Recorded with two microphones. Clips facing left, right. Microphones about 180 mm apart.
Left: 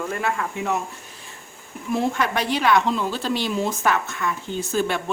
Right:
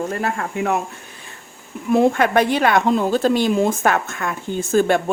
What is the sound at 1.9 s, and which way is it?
A woman's voice, 55° right (ahead or behind).